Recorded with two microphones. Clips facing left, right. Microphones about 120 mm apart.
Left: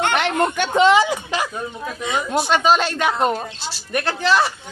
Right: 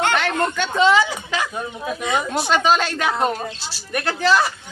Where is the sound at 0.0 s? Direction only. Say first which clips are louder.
Left 1 dB; 20° left (ahead or behind).